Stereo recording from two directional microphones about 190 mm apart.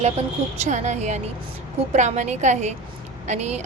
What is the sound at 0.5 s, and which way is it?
A woman's voice, 35° right (ahead or behind).